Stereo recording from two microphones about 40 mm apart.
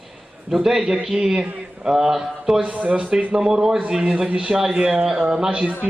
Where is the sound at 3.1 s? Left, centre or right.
Right.